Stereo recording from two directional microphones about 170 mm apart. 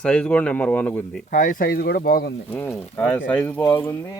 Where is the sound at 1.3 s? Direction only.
55° left (ahead or behind).